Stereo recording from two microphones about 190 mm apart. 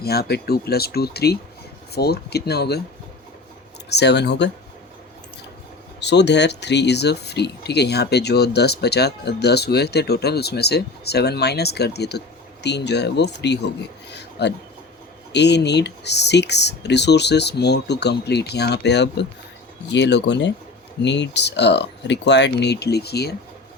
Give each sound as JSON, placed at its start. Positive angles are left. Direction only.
{"t": 0.0, "sound": "speech", "side_deg": 55}
{"t": 3.8, "sound": "speech", "side_deg": 60}
{"t": 6.0, "sound": "speech", "side_deg": 65}
{"t": 14.1, "sound": "a sound", "side_deg": 65}
{"t": 15.3, "sound": "speech", "side_deg": 65}